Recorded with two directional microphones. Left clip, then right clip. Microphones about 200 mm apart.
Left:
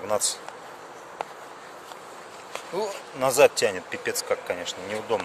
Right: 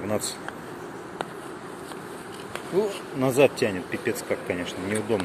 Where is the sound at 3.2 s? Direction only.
35° left (ahead or behind).